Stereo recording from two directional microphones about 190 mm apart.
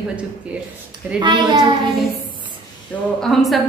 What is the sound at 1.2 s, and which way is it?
Speech, 25° right (ahead or behind).